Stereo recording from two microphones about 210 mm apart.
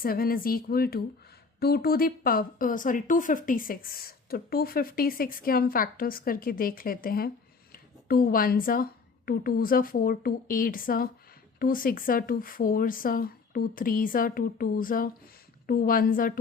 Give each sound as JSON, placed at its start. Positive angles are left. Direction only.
{"t": 0.0, "sound": "a woman's voice", "side_deg": 45}